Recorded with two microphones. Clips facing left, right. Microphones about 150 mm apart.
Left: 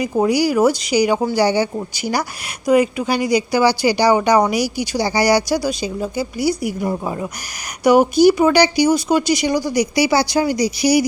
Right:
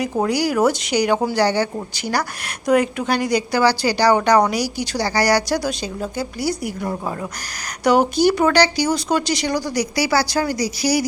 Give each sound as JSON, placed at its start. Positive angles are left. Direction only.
{"t": 0.0, "sound": "speech", "side_deg": 10}